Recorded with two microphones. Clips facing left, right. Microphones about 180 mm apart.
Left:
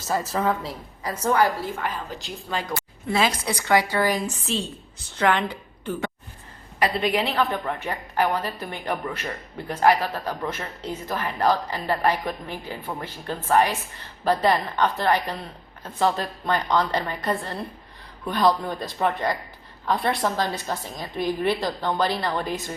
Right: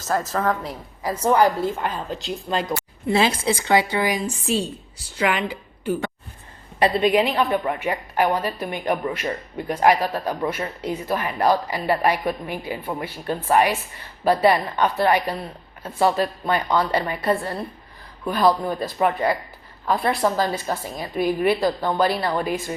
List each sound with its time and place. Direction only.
0.1 s speech: 5° left (ahead or behind)
1.0 s a woman's voice: 15° right (ahead or behind)
6.7 s a woman's voice: 25° right (ahead or behind); by 22.5 s 10° right (ahead or behind)